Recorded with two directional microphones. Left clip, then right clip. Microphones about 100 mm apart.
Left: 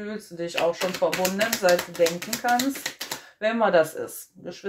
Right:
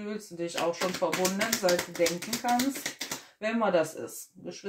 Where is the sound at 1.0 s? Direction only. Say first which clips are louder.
Left 6 dB; 15° left (ahead or behind).